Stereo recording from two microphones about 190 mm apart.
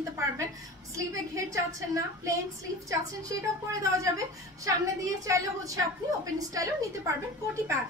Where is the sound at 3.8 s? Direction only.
15° right (ahead or behind).